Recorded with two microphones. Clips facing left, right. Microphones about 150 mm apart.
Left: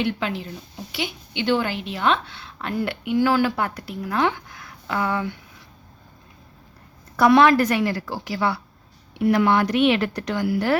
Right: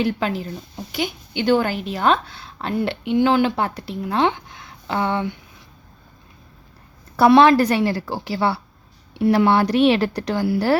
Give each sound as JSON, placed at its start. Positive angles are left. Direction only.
{"t": 0.0, "sound": "a woman's voice", "side_deg": -40}
{"t": 7.2, "sound": "a woman's voice", "side_deg": -30}